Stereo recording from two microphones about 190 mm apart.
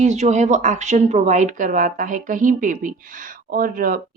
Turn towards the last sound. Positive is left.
turn(degrees=-50)  # may be behind; listen again after turning